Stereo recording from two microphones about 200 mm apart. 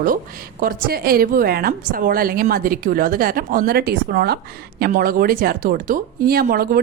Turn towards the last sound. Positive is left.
turn(degrees=-50)  # may be behind; listen again after turning